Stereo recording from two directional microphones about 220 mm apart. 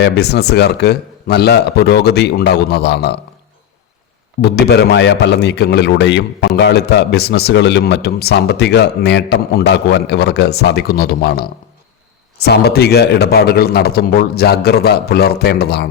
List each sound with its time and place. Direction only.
0.0 s a man's voice: 50° left (ahead or behind)
4.4 s a man's voice: 45° left (ahead or behind)